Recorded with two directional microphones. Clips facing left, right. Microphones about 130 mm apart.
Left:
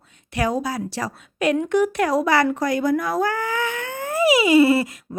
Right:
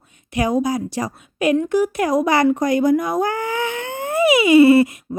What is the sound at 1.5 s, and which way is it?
A woman's voice, centre (ahead or behind).